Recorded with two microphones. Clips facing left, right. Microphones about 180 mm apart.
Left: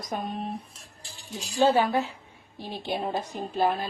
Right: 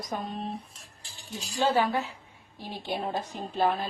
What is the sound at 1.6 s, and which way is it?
A woman's voice, 15° left (ahead or behind).